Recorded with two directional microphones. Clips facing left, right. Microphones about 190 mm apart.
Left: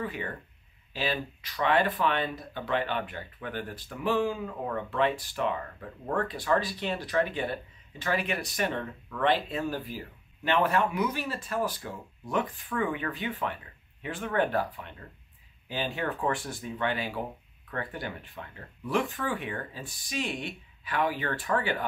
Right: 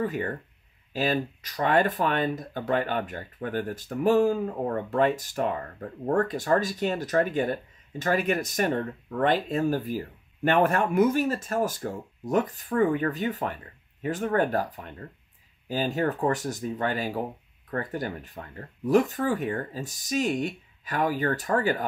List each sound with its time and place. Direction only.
0.0 s speech: 45° right (ahead or behind)